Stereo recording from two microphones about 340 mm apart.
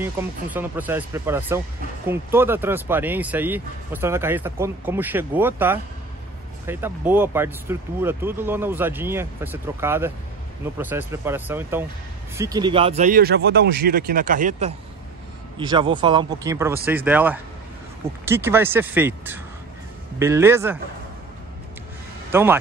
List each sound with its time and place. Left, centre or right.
0.0 s speech: centre
22.3 s speech: centre